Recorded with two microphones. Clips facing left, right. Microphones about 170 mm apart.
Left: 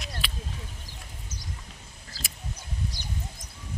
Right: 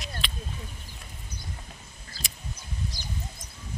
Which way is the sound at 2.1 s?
80° left.